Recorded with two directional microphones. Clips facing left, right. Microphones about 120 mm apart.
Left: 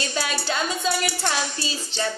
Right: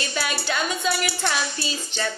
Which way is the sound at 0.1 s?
30° left (ahead or behind).